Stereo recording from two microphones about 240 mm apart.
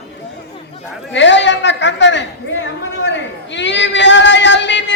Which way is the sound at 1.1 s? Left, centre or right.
Left.